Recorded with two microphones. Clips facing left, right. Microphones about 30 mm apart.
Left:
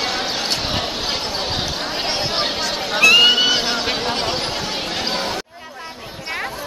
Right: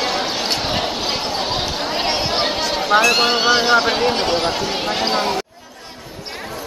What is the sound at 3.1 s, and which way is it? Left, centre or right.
Chatter, centre.